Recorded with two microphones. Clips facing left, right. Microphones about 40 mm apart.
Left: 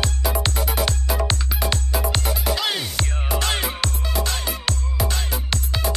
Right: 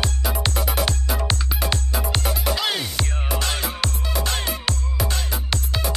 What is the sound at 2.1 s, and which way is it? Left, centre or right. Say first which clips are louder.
Music: even; centre.